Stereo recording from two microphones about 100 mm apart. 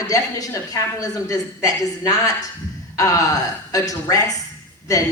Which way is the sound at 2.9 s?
35° left (ahead or behind).